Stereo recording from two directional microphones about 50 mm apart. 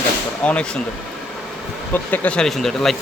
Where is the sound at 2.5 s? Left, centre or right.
Centre.